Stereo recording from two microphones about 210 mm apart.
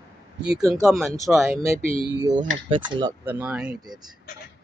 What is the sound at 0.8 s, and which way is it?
Speech, centre (ahead or behind).